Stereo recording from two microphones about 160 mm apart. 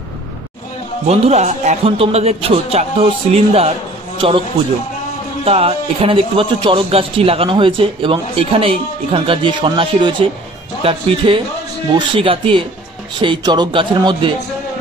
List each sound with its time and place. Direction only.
1.0 s a man's voice: 40° right (ahead or behind)
5.4 s a man's voice: 40° right (ahead or behind)